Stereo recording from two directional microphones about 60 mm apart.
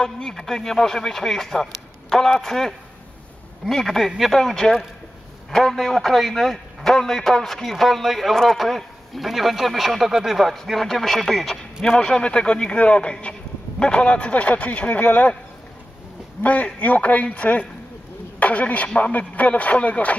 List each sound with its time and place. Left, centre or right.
0.0 s a man's voice: centre
16.4 s a man's voice: left